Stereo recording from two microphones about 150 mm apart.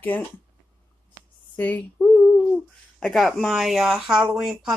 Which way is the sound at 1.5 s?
10° left (ahead or behind).